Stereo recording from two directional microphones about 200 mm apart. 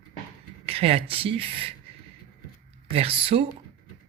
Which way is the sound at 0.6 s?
30° right (ahead or behind).